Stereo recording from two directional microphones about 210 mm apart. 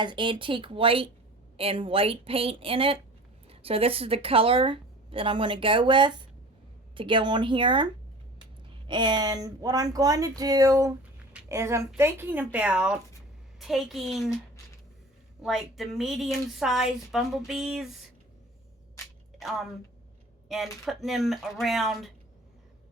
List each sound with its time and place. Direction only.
0.0 s speech: 20° right (ahead or behind)
8.9 s a woman's voice: 20° right (ahead or behind); by 14.3 s centre (ahead or behind)
15.4 s speech: centre (ahead or behind)
19.4 s a woman's voice: centre (ahead or behind)